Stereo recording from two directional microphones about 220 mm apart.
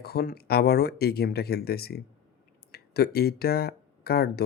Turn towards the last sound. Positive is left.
turn(degrees=45)  # may be behind; listen again after turning